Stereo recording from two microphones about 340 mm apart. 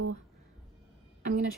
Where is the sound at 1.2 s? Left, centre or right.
Right.